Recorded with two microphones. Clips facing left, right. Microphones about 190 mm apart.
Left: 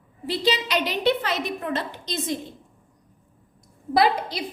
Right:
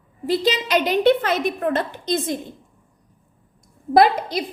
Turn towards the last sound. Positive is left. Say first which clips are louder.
# right 5 dB
turn(degrees=-50)  # may be behind; listen again after turning